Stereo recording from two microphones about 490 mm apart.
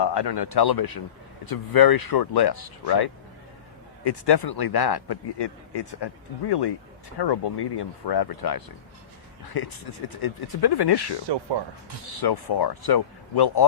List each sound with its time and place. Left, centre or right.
0.0 s a man's voice: left
10.2 s a man's voice: left
12.2 s a man's voice: left